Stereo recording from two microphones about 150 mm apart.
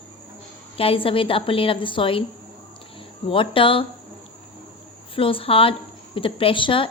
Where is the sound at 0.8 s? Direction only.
40° left (ahead or behind).